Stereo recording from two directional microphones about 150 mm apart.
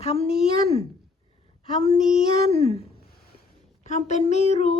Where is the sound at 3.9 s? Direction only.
50° left (ahead or behind).